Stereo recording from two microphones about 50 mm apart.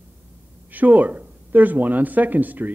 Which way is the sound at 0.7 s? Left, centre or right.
Right.